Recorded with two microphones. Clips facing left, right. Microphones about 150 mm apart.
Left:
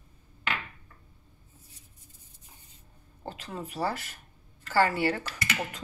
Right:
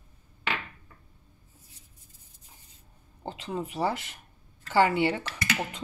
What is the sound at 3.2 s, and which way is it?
Speech, 20° right (ahead or behind).